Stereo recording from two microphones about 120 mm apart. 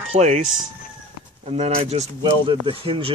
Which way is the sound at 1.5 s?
60° right (ahead or behind).